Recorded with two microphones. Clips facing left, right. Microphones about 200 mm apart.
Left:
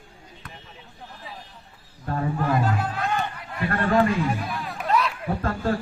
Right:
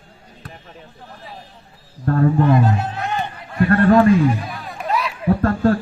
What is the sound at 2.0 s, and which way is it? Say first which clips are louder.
Speech: right 10 dB; 55° right (ahead or behind).